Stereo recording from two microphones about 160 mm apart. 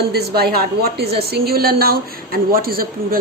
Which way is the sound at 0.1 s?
90° right.